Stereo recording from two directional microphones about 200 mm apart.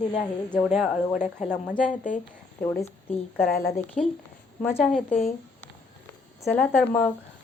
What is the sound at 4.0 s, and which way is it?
A woman's voice, 5° left (ahead or behind).